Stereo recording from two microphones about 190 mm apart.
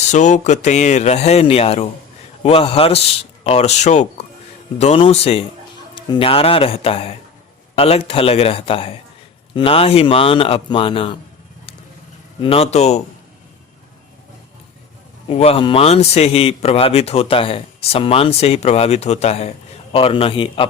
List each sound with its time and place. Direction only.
0.1 s a man's voice: 40° left (ahead or behind)
12.4 s a man's voice: 30° left (ahead or behind)
15.3 s a man's voice: 30° left (ahead or behind)